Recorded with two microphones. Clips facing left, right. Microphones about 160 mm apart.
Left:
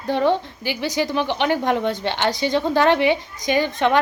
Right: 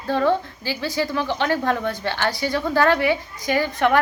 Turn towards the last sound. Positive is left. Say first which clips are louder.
# left 1 dB
turn(degrees=20)  # may be behind; listen again after turning